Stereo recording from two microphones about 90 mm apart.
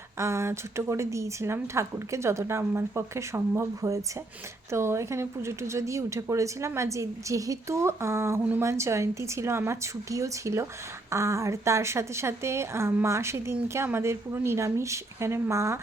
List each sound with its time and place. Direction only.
0.2 s a woman's voice: 30° right (ahead or behind)